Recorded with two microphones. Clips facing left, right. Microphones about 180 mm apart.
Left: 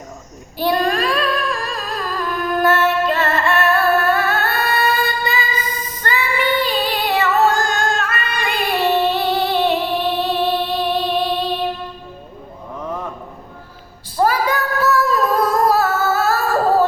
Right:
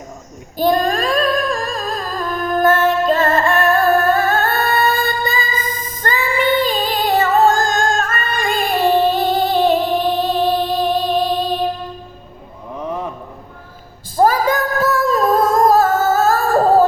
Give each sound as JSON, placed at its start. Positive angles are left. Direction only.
{"t": 0.5, "sound": "female singing", "side_deg": -45}
{"t": 12.8, "sound": "a sound", "side_deg": -15}
{"t": 14.2, "sound": "female singing", "side_deg": -45}